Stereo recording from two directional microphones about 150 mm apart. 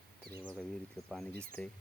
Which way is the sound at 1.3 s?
10° left (ahead or behind).